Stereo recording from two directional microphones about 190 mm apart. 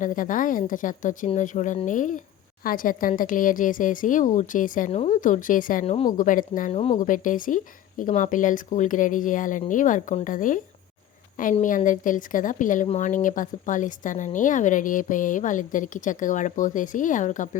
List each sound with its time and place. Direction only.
0.0 s speech: 45° left (ahead or behind)
5.8 s a woman's voice: 30° left (ahead or behind)
6.1 s speech: 45° left (ahead or behind)